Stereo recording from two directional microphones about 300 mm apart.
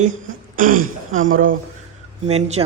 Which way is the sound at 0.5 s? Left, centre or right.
Right.